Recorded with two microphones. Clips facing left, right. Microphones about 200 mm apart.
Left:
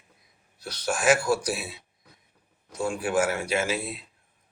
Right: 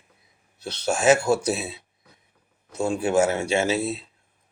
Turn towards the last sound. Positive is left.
turn(degrees=-25)  # may be behind; listen again after turning